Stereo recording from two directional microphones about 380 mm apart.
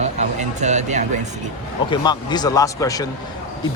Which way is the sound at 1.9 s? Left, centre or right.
Centre.